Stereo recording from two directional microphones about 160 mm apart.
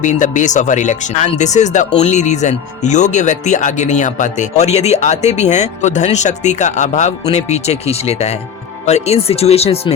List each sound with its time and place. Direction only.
0.0 s speech: 50° left (ahead or behind)